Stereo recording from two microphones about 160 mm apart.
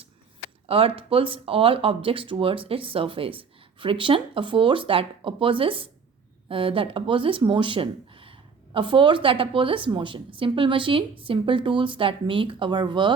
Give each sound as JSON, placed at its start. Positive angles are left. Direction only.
{"t": 0.7, "sound": "speech", "side_deg": -35}